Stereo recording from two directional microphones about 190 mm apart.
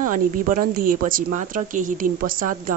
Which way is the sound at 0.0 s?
45° right (ahead or behind).